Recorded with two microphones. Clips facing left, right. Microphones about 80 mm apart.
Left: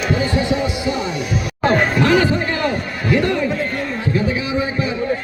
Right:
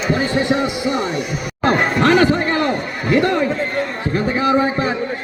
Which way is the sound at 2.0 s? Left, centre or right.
Right.